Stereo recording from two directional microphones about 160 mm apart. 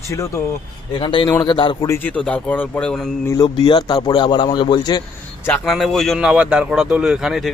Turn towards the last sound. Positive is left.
turn(degrees=0)  # may be behind; listen again after turning